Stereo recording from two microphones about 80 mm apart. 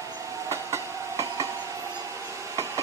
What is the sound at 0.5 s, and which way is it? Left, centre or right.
Train, right.